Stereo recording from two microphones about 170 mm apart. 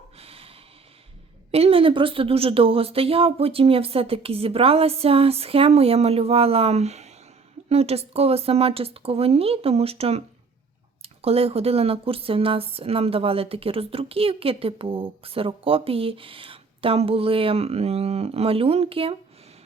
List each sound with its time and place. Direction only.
0.2 s snort: 35° right (ahead or behind)
1.5 s speech: 35° right (ahead or behind)